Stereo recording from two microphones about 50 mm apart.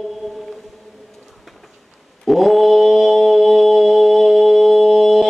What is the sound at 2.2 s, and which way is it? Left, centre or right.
Mantra, centre.